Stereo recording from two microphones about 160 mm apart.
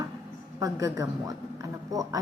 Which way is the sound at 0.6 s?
20° right (ahead or behind).